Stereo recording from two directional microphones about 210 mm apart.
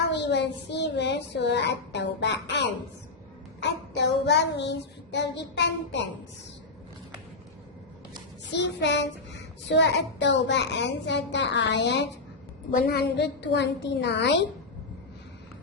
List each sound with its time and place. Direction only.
0.1 s child singing: 55° left (ahead or behind)
8.5 s child singing: 55° left (ahead or behind)